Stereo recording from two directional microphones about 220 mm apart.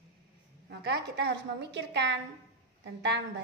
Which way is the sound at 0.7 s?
50° right (ahead or behind).